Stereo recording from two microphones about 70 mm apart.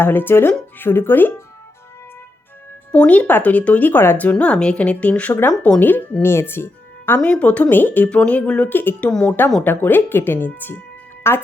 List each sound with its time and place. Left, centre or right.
0.0 s speech: left
2.9 s speech: centre; by 7.2 s left
7.2 s speech: centre
9.0 s speech: centre
9.6 s speech: left